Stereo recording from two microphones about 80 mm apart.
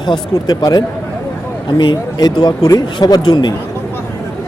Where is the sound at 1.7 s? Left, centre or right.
Left.